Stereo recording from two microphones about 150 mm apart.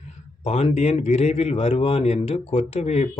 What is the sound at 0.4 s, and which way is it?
Speech, 45° left (ahead or behind).